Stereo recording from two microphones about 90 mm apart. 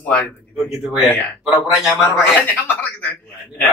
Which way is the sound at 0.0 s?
15° left (ahead or behind).